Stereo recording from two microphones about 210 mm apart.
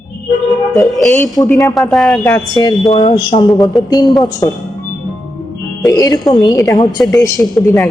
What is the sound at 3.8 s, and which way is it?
Speech, 20° left (ahead or behind).